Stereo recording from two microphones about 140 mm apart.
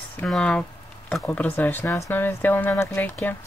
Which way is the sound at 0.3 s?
5° left (ahead or behind).